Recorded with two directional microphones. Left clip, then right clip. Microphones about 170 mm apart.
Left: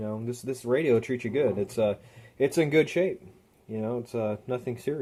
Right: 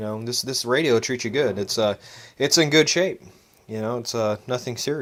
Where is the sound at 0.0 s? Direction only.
20° right (ahead or behind).